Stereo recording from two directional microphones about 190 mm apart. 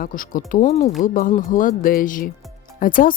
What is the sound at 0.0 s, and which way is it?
Speech, 45° left (ahead or behind).